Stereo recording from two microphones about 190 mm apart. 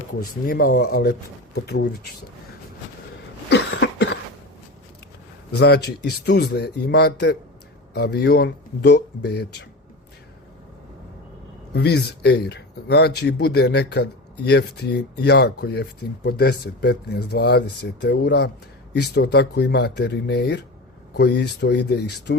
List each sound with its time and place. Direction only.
0.2 s speech: 55° left (ahead or behind)
3.5 s cough: 70° left (ahead or behind)
5.5 s speech: 60° left (ahead or behind)
11.7 s speech: 60° left (ahead or behind)